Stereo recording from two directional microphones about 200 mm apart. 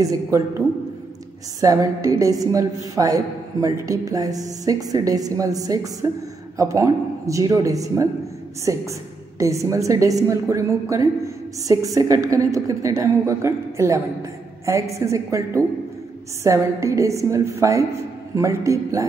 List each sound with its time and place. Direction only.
0.0 s a woman's voice: 15° right (ahead or behind)